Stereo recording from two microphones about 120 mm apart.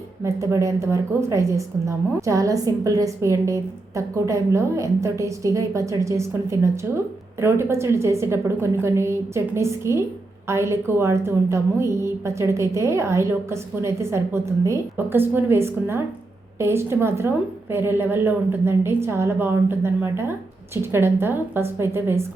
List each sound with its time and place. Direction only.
0.3 s a woman's voice: 25° right (ahead or behind)